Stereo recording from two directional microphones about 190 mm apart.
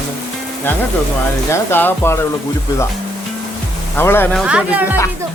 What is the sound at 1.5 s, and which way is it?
Speech, 10° left (ahead or behind).